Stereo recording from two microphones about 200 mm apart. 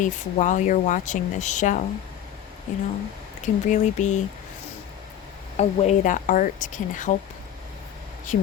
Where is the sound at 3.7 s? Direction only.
35° left (ahead or behind).